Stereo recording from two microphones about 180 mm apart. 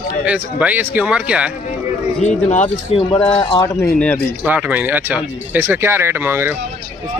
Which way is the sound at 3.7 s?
10° left (ahead or behind).